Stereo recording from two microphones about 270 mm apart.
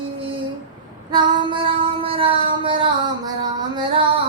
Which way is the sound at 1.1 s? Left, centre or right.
Centre.